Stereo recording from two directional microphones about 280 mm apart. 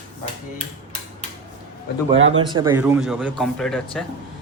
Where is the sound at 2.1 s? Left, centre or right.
Right.